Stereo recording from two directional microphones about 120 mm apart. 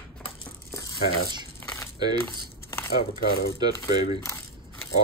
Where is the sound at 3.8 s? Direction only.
50° left (ahead or behind).